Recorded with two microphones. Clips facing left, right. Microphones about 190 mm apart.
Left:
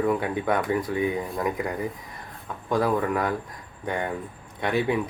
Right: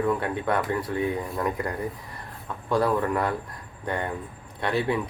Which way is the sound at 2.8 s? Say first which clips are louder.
Even; centre (ahead or behind).